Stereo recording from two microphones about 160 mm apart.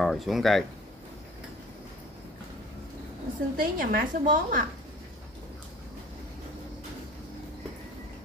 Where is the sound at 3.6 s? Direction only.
60° right (ahead or behind).